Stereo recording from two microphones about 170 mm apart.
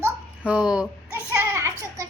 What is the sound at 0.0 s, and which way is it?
Babbling, 5° right (ahead or behind).